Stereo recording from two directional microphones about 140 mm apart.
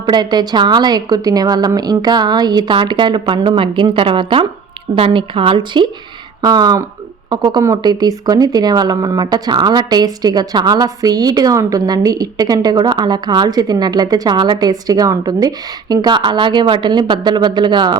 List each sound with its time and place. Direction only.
0.0 s a woman's voice: 30° right (ahead or behind)